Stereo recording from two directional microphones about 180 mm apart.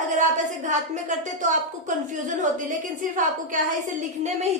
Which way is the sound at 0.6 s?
45° right (ahead or behind).